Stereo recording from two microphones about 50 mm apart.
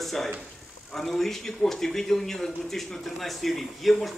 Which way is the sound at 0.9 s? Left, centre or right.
Centre.